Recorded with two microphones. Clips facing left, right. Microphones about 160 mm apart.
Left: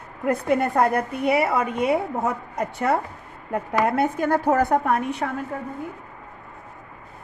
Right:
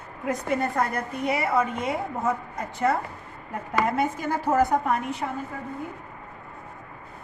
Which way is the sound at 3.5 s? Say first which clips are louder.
Left 4 dB; 60° left (ahead or behind).